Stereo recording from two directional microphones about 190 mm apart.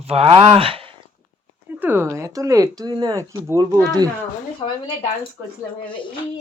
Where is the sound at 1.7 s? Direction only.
10° right (ahead or behind).